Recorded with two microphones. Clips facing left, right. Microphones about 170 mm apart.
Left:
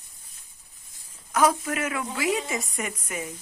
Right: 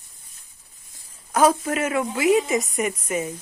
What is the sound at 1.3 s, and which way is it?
A woman's voice, 30° right (ahead or behind).